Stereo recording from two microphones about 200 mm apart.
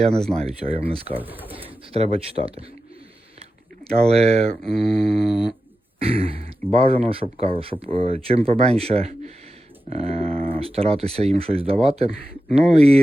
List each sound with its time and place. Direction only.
0.0 s speech: centre (ahead or behind)
0.3 s speech: 30° right (ahead or behind)
1.1 s speech: 10° right (ahead or behind)
1.9 s speech: 30° right (ahead or behind)
4.2 s speech: 5° left (ahead or behind)
6.0 s speech: 30° right (ahead or behind)